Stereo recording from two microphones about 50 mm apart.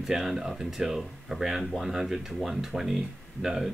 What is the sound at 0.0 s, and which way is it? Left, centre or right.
Speech, centre.